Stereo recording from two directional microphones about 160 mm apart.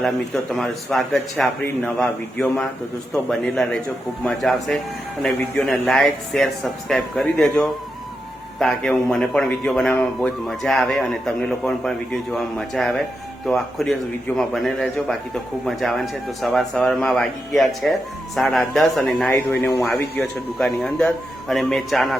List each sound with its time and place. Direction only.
0.5 s a man's voice: centre (ahead or behind)
19.3 s speech: 15° left (ahead or behind)
19.9 s a man's voice: 5° left (ahead or behind)